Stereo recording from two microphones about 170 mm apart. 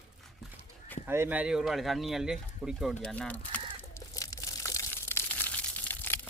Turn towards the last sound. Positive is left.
turn(degrees=10)  # may be behind; listen again after turning